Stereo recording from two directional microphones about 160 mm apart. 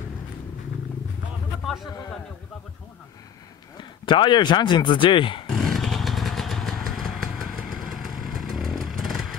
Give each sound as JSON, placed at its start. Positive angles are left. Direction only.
{"t": 4.0, "sound": "speech", "side_deg": 30}
{"t": 5.5, "sound": "motorcycle", "side_deg": 0}